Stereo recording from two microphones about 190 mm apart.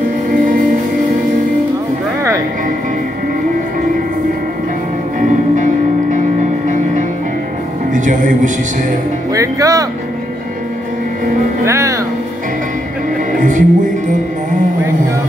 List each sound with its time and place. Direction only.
5.2 s music: 40° right (ahead or behind)
7.9 s speech: 45° right (ahead or behind)
9.3 s music: 15° right (ahead or behind)
11.6 s speech: 15° right (ahead or behind)
13.4 s music: 45° right (ahead or behind)